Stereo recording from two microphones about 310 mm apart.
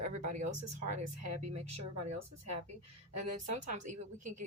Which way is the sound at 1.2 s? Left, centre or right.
Right.